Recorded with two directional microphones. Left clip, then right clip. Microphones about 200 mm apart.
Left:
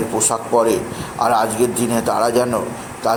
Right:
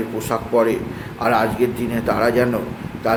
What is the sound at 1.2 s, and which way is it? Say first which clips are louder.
A man's voice: left 2 dB; 20° right (ahead or behind).